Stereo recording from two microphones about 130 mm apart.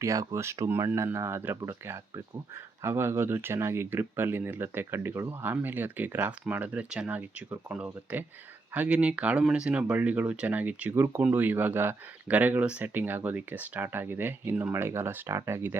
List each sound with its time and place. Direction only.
0.0 s speech: 25° right (ahead or behind)